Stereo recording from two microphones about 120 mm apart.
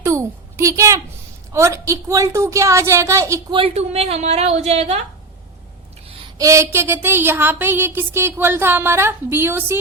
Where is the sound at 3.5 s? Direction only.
50° right (ahead or behind).